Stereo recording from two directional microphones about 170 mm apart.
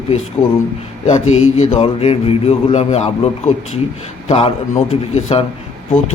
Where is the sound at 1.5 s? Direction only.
40° left (ahead or behind).